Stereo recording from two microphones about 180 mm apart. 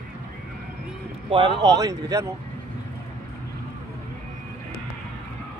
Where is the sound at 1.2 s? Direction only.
30° right (ahead or behind).